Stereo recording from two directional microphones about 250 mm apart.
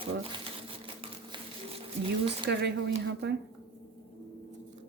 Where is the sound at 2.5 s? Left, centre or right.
Right.